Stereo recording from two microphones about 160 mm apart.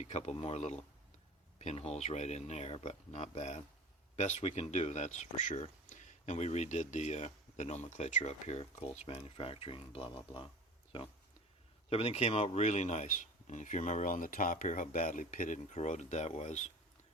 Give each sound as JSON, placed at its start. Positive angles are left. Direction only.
{"t": 0.0, "sound": "speech", "side_deg": 45}
{"t": 11.9, "sound": "speech", "side_deg": 40}